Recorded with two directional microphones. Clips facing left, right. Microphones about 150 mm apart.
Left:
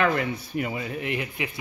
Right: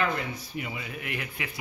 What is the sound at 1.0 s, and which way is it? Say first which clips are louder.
Speech: left 6 dB; 25° left (ahead or behind).